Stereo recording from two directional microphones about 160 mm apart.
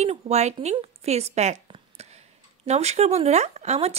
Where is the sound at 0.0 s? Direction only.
45° right (ahead or behind).